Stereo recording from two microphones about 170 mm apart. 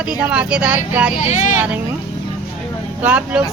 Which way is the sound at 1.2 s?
45° left (ahead or behind).